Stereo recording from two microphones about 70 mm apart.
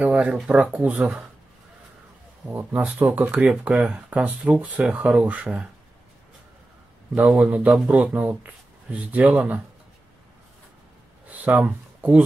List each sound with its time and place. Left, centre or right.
0.0 s speech: centre
2.5 s speech: right
7.3 s speech: right
11.2 s a sound: right